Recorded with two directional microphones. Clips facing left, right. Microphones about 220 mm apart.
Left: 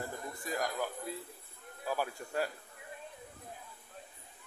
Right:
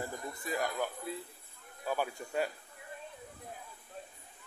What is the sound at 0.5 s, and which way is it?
Speech, centre (ahead or behind).